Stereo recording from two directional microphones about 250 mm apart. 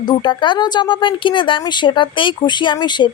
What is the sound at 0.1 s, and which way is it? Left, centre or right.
A woman's voice, centre.